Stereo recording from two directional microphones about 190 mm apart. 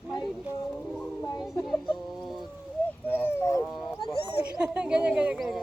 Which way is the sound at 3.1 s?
10° left (ahead or behind).